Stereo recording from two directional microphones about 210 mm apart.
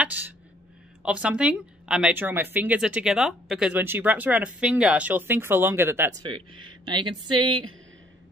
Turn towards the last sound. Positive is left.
turn(degrees=-20)  # may be behind; listen again after turning